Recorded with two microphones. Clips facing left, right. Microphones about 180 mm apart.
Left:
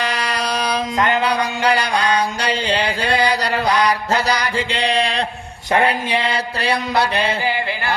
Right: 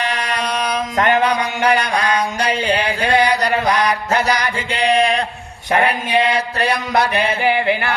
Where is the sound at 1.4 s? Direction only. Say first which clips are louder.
Right 1 dB; 30° left (ahead or behind).